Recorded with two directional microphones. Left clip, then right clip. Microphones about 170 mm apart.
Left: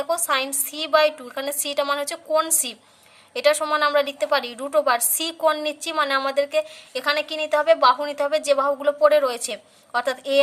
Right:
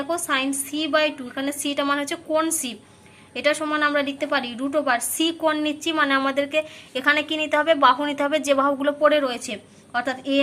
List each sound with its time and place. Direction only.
0.3 s a woman's voice: 40° left (ahead or behind)
9.0 s a woman's voice: 40° left (ahead or behind)